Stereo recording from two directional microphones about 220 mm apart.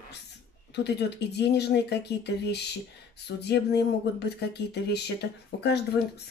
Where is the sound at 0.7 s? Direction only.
50° left (ahead or behind).